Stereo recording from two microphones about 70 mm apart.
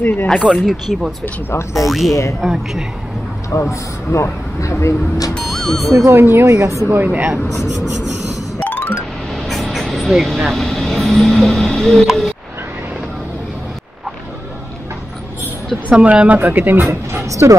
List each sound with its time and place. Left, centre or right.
0.0 s speech: left
0.7 s speech: centre
1.5 s speech: left
1.9 s speech: centre
3.4 s speech: left
5.3 s speech: centre
6.0 s speech: right
6.4 s a woman's voice: right
6.9 s speech: right
8.5 s music: left
9.3 s vehicle: centre
15.9 s speech: centre
16.3 s speech: right